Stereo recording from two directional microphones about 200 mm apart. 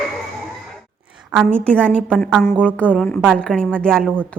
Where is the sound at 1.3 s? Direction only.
5° left (ahead or behind).